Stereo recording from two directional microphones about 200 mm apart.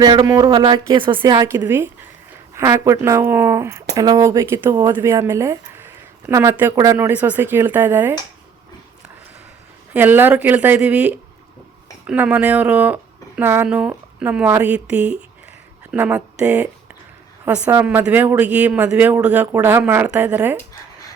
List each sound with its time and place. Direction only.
0.0 s speech: 20° right (ahead or behind)
9.9 s speech: 10° right (ahead or behind)